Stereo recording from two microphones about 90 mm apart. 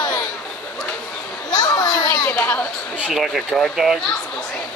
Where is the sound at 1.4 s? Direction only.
50° left (ahead or behind).